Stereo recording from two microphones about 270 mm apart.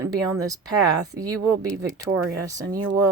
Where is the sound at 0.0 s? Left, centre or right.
Centre.